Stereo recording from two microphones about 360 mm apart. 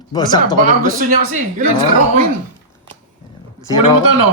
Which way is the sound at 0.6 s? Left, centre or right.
Right.